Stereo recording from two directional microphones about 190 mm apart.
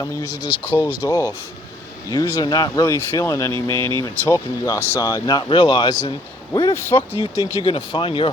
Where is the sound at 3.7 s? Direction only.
25° right (ahead or behind).